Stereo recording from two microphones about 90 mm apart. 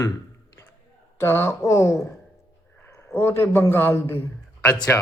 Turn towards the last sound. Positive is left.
turn(degrees=25)  # may be behind; listen again after turning